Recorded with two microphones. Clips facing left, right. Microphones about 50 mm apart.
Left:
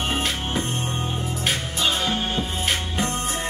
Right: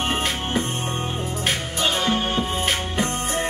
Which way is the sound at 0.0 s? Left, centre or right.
Right.